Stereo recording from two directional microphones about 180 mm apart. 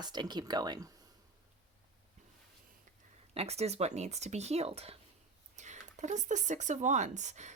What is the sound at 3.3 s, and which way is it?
Speech, 35° right (ahead or behind).